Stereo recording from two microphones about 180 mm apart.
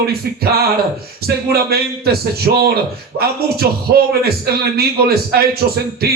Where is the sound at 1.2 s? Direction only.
60° right (ahead or behind).